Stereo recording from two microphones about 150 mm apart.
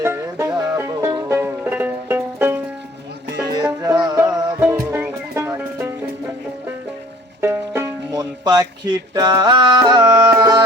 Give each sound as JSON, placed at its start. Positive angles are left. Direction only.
{"t": 0.0, "sound": "music", "side_deg": -15}
{"t": 7.4, "sound": "music", "side_deg": -15}